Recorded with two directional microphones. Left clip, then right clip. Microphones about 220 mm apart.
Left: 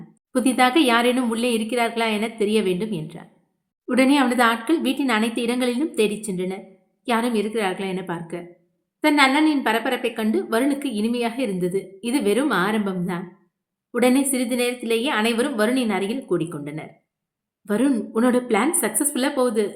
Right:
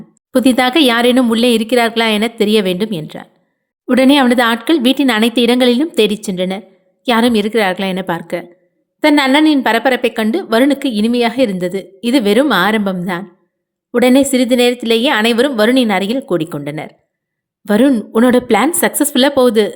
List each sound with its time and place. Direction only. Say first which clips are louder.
0.3 s a woman's voice: right 7 dB; 35° right (ahead or behind)